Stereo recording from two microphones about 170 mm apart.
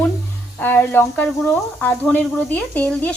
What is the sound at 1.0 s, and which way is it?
Speech, centre (ahead or behind).